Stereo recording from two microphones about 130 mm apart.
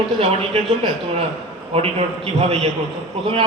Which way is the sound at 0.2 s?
50° right (ahead or behind).